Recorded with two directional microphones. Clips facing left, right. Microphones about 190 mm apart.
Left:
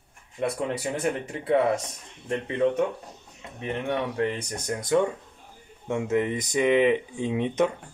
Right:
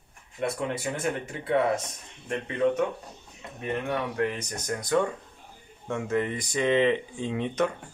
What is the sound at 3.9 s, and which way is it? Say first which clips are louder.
Speech: left 3 dB; 25° left (ahead or behind).